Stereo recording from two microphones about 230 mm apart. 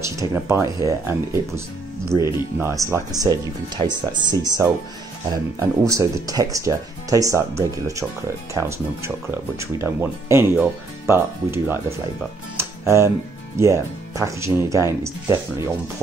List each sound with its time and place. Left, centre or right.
0.0 s speech: centre
12.5 s music: centre
13.6 s speech: centre